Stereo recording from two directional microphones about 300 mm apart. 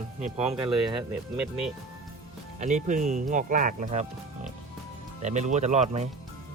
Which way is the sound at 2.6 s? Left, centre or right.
Right.